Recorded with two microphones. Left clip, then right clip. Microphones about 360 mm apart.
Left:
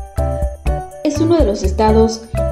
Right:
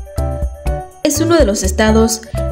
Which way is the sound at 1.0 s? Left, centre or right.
Right.